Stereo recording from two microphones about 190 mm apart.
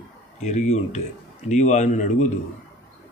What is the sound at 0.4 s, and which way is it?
Speech, 35° left (ahead or behind).